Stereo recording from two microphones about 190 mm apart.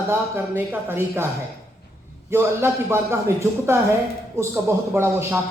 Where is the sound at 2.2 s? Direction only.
15° right (ahead or behind).